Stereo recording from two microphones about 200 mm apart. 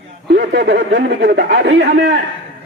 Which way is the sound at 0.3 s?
60° right (ahead or behind).